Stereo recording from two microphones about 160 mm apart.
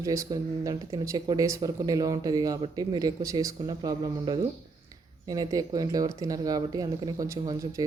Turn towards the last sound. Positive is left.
turn(degrees=-20)  # may be behind; listen again after turning